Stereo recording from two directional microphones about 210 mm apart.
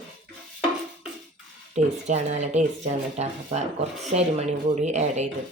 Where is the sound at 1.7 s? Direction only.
30° right (ahead or behind).